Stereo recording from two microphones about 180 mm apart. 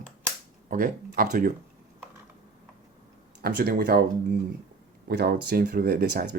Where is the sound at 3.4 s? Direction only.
60° right (ahead or behind).